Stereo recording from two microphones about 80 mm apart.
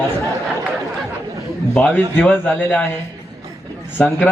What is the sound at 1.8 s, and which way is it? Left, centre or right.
Speech, centre.